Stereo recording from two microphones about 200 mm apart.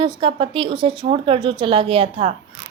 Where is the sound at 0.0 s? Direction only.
25° right (ahead or behind).